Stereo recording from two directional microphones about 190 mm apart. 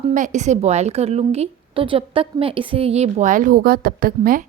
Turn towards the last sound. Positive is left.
turn(degrees=-50)  # may be behind; listen again after turning